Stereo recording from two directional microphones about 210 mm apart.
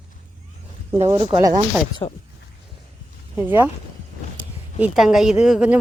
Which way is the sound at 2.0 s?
25° left (ahead or behind).